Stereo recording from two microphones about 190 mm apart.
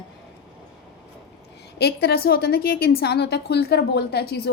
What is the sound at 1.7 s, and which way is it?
A woman's voice, 60° left (ahead or behind).